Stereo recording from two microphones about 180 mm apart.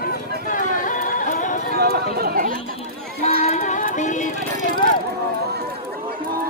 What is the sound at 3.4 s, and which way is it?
Music, 40° left (ahead or behind).